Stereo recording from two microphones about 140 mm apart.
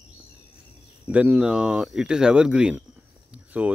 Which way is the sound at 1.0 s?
10° right (ahead or behind).